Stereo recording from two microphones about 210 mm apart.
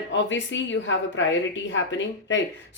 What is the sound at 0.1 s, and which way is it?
A woman's voice, 60° left (ahead or behind).